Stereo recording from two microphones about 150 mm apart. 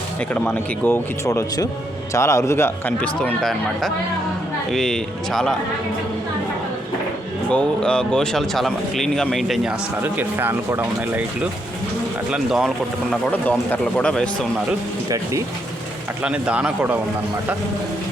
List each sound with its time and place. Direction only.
0.3 s speech: 15° left (ahead or behind)
7.5 s speech: 5° left (ahead or behind)
10.0 s speech: 15° right (ahead or behind)
12.3 s speech: centre (ahead or behind)
13.3 s speech: 10° left (ahead or behind)
15.1 s speech: 20° right (ahead or behind)
16.2 s speech: 10° right (ahead or behind)